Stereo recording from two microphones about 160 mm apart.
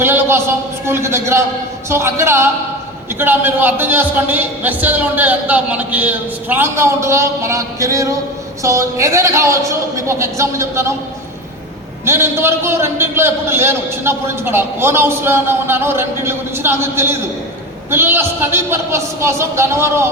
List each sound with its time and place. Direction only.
0.0 s a man's voice: 15° right (ahead or behind)
12.0 s a man's voice: 15° right (ahead or behind)